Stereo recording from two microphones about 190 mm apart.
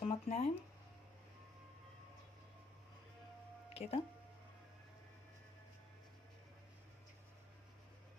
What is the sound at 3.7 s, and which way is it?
Speech, 30° left (ahead or behind).